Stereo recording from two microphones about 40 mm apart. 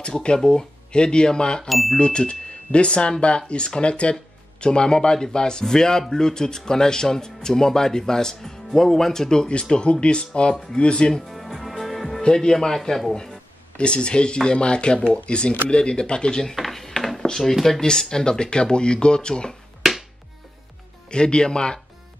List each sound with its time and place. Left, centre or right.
0.0 s speech: left
1.7 s speech: centre
2.0 s speech: left
9.5 s speech: left
11.2 s music: centre
12.2 s speech: centre
13.7 s speech: left
16.5 s a sound: centre
17.8 s speech: centre
19.8 s music: centre
21.1 s speech: left